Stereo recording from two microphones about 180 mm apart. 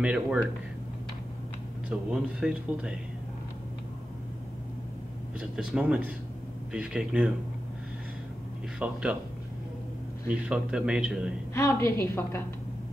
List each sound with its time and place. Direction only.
0.0 s speech: 5° right (ahead or behind)
1.9 s a man's voice: 5° right (ahead or behind)
5.6 s a man's voice: 5° right (ahead or behind)
8.7 s speech: 5° right (ahead or behind)
10.2 s a man's voice: 5° right (ahead or behind)
11.5 s a woman's voice: 15° left (ahead or behind)